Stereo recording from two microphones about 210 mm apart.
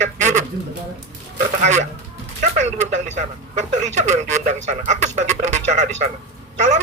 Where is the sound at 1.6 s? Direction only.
35° right (ahead or behind).